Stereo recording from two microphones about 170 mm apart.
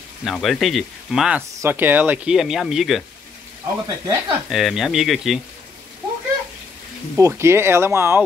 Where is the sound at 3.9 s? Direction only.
25° right (ahead or behind).